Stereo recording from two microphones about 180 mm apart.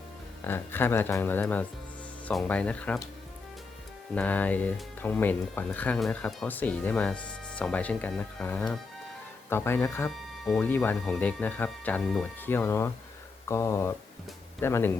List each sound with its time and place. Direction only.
0.4 s speech: 10° left (ahead or behind)
4.1 s speech: 10° left (ahead or behind)
10.1 s speech: centre (ahead or behind)